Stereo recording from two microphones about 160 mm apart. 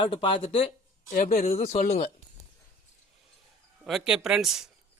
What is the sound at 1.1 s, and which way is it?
Speech, 55° left (ahead or behind).